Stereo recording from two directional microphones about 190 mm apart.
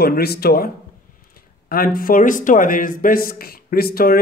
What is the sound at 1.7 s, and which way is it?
Speech, 50° left (ahead or behind).